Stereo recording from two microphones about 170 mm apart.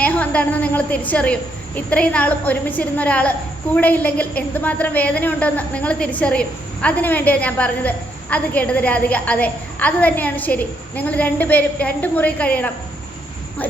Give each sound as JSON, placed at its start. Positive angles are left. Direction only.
{"t": 0.0, "sound": "a woman's voice", "side_deg": 10}